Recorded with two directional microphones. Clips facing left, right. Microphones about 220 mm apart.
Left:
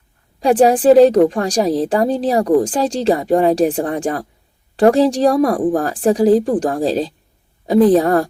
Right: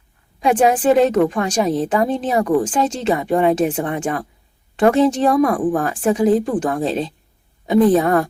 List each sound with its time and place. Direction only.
0.3 s a woman's voice: 35° left (ahead or behind)